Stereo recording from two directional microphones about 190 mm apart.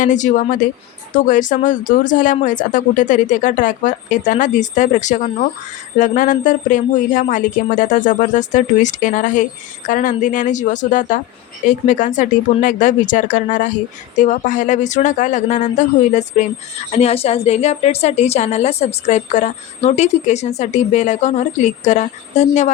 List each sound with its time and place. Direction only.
0.0 s a woman's voice: 40° left (ahead or behind)